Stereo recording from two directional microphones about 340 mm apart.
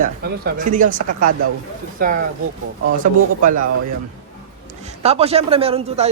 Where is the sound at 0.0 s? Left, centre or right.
Right.